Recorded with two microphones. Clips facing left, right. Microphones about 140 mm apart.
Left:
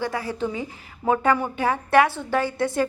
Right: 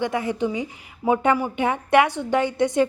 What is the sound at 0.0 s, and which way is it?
A woman's voice, 20° right (ahead or behind).